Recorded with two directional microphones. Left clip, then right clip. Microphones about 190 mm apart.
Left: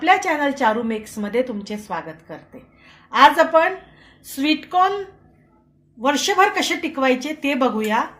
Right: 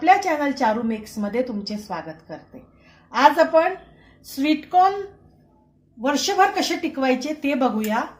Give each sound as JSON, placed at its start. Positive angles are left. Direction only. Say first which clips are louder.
{"t": 0.0, "sound": "speech", "louder": "even", "side_deg": -15}
{"t": 6.0, "sound": "speech", "louder": "left 2 dB", "side_deg": -10}